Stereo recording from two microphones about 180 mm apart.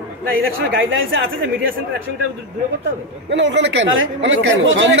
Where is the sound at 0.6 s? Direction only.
90° right.